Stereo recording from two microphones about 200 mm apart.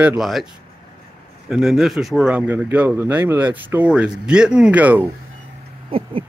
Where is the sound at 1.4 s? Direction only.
Centre (ahead or behind).